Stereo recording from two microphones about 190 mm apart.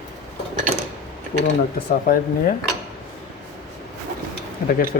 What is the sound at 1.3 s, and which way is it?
Speech, 55° left (ahead or behind).